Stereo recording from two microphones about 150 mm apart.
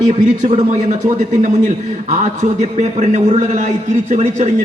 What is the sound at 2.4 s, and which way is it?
A man's voice, 45° right (ahead or behind).